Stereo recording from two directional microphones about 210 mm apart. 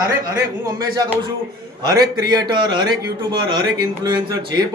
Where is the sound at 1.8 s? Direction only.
20° right (ahead or behind).